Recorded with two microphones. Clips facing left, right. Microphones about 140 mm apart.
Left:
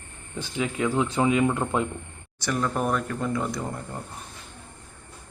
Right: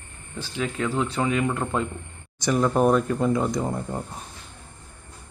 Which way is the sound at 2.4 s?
20° right (ahead or behind).